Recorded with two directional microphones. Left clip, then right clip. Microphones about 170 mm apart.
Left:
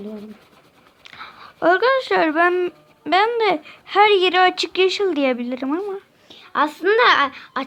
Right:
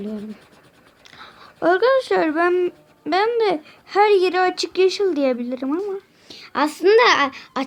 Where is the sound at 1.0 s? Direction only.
Centre (ahead or behind).